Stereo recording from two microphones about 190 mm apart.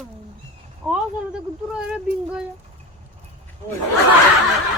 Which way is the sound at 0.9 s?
5° right (ahead or behind).